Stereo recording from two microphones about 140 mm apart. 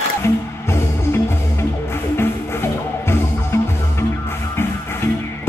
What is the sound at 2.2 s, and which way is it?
Music, 15° left (ahead or behind).